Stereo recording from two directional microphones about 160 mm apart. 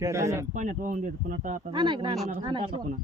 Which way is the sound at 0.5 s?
55° right (ahead or behind).